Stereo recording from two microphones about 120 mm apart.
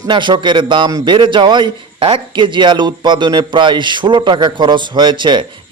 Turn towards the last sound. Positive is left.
turn(degrees=-40)  # may be behind; listen again after turning